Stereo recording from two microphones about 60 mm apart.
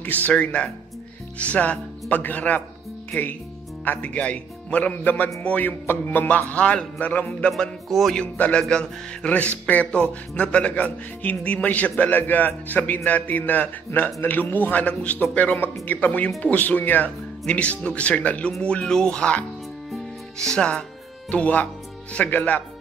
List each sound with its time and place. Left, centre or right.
0.0 s a man's voice: left
21.3 s a man's voice: left